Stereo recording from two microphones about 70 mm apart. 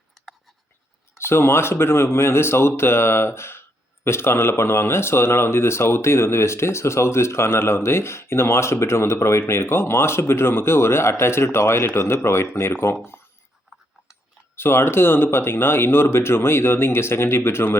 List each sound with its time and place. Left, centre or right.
1.2 s speech: left
14.5 s speech: left